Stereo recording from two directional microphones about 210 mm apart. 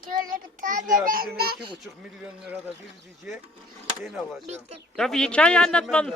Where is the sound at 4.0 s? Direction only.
Centre (ahead or behind).